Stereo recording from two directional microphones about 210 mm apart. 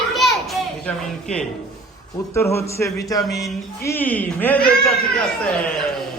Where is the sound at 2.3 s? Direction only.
15° left (ahead or behind).